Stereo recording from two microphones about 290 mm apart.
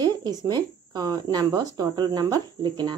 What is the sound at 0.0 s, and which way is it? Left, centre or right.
Speech, centre.